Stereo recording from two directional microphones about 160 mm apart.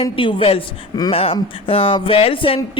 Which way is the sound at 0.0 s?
35° left (ahead or behind).